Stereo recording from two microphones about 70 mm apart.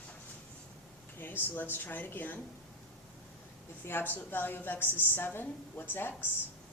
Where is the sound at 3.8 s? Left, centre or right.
Left.